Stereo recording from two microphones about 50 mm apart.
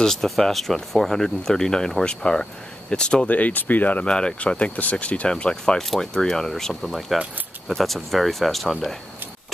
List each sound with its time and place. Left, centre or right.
0.0 s speech: centre
3.3 s speech: left
4.0 s speech: centre